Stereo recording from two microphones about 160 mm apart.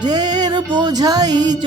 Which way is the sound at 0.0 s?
25° right (ahead or behind).